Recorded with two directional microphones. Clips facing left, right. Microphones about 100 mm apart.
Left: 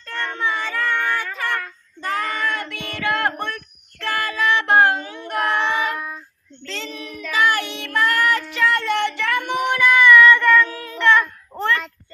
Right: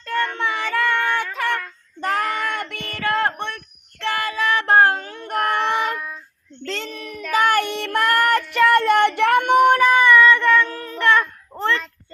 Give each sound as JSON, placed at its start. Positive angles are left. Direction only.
{"t": 0.0, "sound": "child singing", "side_deg": -70}
{"t": 2.0, "sound": "child singing", "side_deg": -60}
{"t": 6.0, "sound": "child singing", "side_deg": 10}
{"t": 6.7, "sound": "child singing", "side_deg": -55}
{"t": 10.7, "sound": "child singing", "side_deg": -40}